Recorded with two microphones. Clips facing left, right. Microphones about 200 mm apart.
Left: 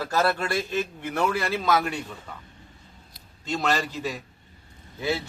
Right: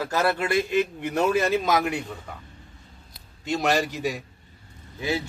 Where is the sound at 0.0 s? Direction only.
15° right (ahead or behind).